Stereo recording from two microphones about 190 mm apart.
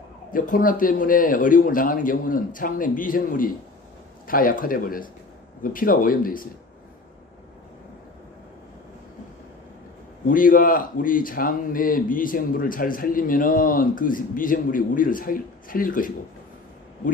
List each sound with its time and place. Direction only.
0.3 s speech: 45° left (ahead or behind)
10.2 s speech: 45° left (ahead or behind)